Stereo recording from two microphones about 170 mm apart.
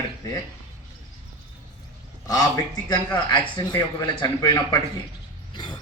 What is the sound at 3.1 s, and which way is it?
Speech, 25° left (ahead or behind).